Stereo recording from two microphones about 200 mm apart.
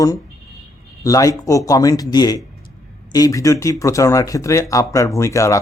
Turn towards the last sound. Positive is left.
turn(degrees=15)  # may be behind; listen again after turning